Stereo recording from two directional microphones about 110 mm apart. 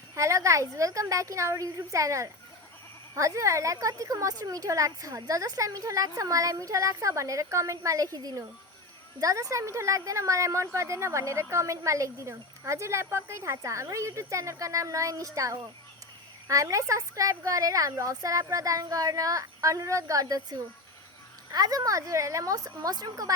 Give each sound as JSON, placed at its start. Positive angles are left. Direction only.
{"t": 0.1, "sound": "a woman's voice", "side_deg": -30}